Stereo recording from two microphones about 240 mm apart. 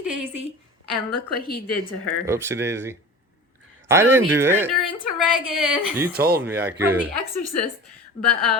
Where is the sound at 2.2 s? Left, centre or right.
Centre.